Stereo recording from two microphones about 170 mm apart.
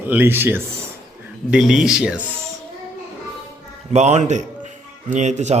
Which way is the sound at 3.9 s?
40° right (ahead or behind).